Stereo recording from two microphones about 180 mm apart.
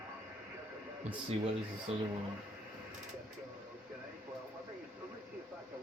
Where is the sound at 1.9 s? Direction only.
35° right (ahead or behind).